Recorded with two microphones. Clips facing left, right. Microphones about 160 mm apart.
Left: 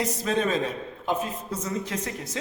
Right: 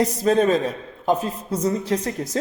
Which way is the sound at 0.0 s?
40° right (ahead or behind).